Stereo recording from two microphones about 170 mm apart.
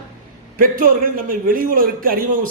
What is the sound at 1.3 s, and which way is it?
A man's voice, 55° right (ahead or behind).